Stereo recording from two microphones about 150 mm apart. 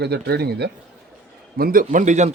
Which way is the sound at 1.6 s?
80° right.